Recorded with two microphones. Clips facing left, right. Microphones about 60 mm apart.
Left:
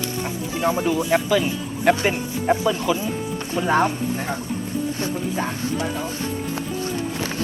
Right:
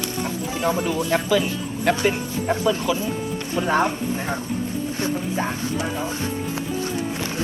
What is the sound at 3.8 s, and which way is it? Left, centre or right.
Speech, right.